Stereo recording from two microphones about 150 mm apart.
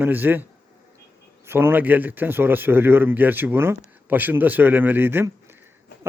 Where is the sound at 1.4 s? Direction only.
15° right (ahead or behind).